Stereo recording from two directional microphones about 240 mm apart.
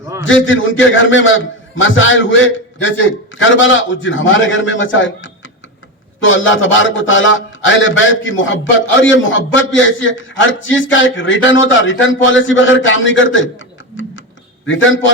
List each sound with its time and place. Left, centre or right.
0.3 s a man's voice: left
14.7 s a man's voice: left